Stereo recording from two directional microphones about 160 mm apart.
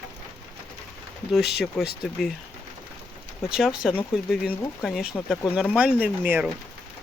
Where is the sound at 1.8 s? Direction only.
5° left (ahead or behind).